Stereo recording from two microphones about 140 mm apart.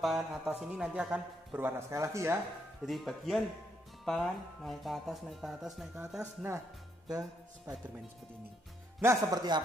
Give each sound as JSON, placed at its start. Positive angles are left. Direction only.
{"t": 0.0, "sound": "speech", "side_deg": 0}
{"t": 1.9, "sound": "speech", "side_deg": -20}
{"t": 2.8, "sound": "speech", "side_deg": 0}
{"t": 7.1, "sound": "music", "side_deg": -25}
{"t": 9.0, "sound": "speech", "side_deg": -25}